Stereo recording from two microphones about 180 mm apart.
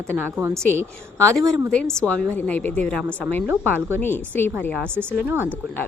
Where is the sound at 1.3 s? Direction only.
15° right (ahead or behind).